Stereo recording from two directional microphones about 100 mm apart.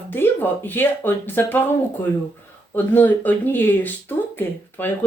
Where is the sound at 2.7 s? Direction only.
20° left (ahead or behind).